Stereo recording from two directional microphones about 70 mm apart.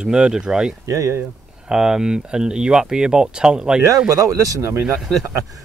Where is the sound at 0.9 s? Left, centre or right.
Right.